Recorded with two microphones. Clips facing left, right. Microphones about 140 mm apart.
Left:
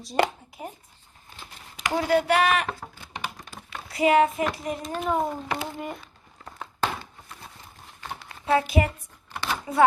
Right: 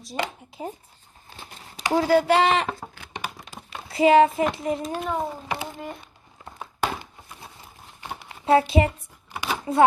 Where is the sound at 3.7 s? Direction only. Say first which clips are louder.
Right 4 dB; 25° right (ahead or behind).